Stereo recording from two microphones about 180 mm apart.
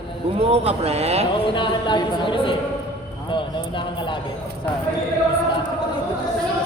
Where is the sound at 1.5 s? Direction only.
25° left (ahead or behind).